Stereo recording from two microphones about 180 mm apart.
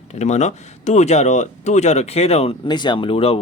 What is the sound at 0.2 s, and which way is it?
Speech, 40° left (ahead or behind).